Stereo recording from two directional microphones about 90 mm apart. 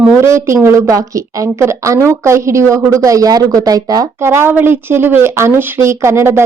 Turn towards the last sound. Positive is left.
turn(degrees=-30)  # may be behind; listen again after turning